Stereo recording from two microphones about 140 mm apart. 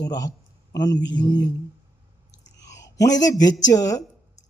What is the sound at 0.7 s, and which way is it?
Mantra, 30° left (ahead or behind).